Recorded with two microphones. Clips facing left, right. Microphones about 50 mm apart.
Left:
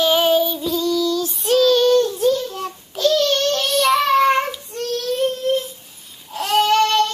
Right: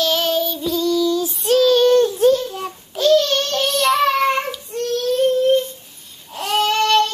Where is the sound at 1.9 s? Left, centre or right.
Right.